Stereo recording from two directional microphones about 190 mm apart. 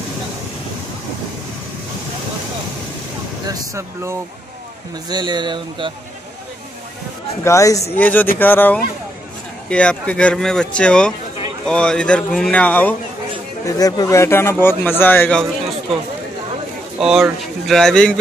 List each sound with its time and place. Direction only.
3.4 s speech: 15° right (ahead or behind)
7.4 s a man's voice: 15° left (ahead or behind)
13.7 s a man's voice: 20° left (ahead or behind)
17.0 s speech: centre (ahead or behind)